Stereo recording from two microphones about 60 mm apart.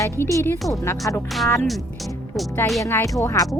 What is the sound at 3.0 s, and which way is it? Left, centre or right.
Speech, left.